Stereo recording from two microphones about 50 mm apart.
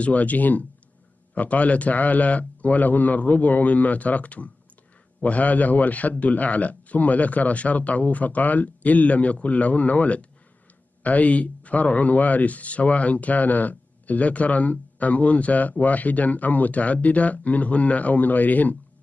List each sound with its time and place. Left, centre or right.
0.0 s a man's voice: left